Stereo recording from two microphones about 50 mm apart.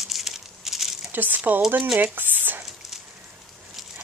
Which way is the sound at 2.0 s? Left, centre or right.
Right.